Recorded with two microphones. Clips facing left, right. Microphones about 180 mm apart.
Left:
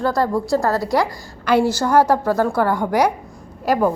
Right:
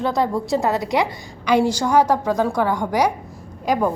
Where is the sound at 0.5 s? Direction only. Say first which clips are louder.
Left 1 dB; 20° right (ahead or behind).